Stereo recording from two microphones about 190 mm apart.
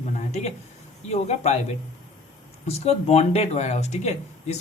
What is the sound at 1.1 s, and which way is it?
Speech, 35° left (ahead or behind).